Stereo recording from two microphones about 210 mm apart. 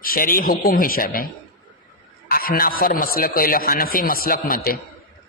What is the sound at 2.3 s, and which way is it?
A man's voice, 45° left (ahead or behind).